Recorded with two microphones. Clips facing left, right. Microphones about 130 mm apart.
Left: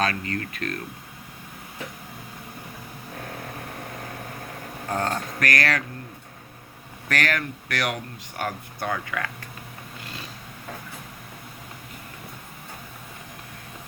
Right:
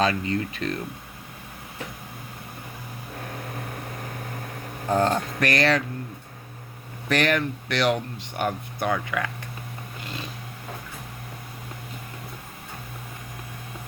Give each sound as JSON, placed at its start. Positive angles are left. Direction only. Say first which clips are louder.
{"t": 0.0, "sound": "speech", "louder": "right 3 dB", "side_deg": -20}
{"t": 4.9, "sound": "speech", "louder": "right 5 dB", "side_deg": -25}
{"t": 7.1, "sound": "speech", "louder": "right 4 dB", "side_deg": -20}